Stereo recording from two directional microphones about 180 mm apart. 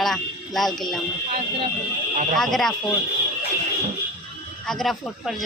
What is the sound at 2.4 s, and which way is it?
Speech, centre (ahead or behind).